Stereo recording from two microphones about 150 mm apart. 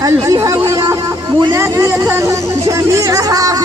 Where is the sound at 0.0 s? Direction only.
25° right (ahead or behind).